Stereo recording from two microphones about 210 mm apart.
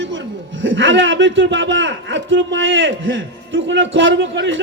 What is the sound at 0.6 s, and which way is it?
Speech, 65° right (ahead or behind).